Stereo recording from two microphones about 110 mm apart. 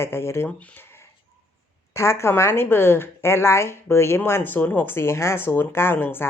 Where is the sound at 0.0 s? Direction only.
20° left (ahead or behind).